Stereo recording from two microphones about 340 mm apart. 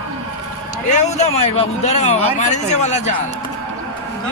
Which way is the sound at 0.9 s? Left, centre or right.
Left.